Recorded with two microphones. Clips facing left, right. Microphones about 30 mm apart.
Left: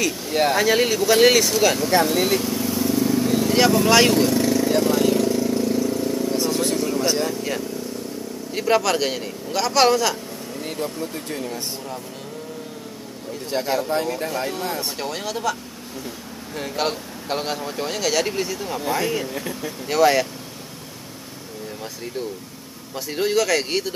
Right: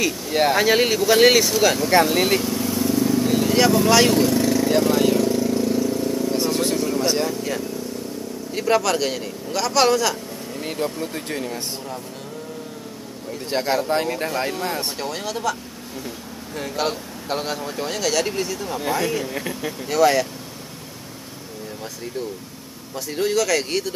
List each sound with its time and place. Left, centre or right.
0.3 s speech: centre
2.0 s speech: right
2.4 s vehicle: centre
6.3 s vehicle: centre
7.2 s vehicle: centre
8.5 s speech: centre
10.6 s speech: centre
13.5 s speech: right
15.0 s speech: centre
16.5 s speech: centre
19.2 s speech: centre
19.9 s speech: centre
22.9 s speech: centre